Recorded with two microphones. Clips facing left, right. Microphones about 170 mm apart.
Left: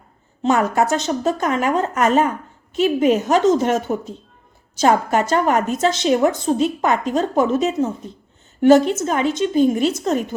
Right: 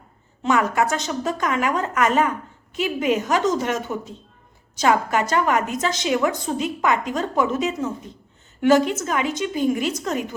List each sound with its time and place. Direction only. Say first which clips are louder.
0.4 s a woman's voice: left 3 dB; 30° left (ahead or behind)